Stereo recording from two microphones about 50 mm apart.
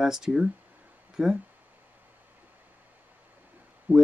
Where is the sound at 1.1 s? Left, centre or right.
Centre.